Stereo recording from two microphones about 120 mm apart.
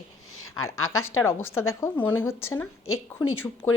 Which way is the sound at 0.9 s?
20° left (ahead or behind).